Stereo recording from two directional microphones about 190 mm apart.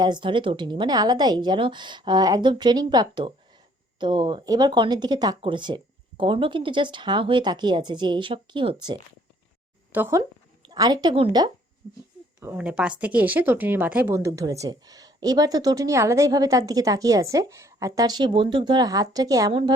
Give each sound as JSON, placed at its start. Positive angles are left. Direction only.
{"t": 0.0, "sound": "speech", "side_deg": -25}
{"t": 9.9, "sound": "speech", "side_deg": -15}
{"t": 12.4, "sound": "speech", "side_deg": -10}